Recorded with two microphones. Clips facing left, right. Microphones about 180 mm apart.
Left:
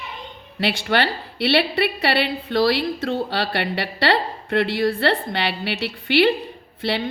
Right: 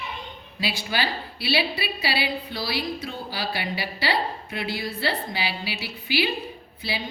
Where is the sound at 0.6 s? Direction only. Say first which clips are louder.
Left 7 dB; 65° left (ahead or behind).